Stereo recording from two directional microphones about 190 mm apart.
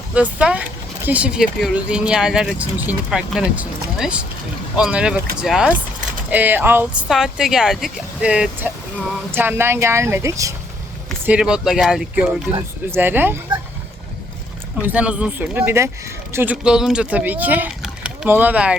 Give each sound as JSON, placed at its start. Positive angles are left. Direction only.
{"t": 0.1, "sound": "speech", "side_deg": -5}
{"t": 11.3, "sound": "speech", "side_deg": -5}
{"t": 14.8, "sound": "speech", "side_deg": -10}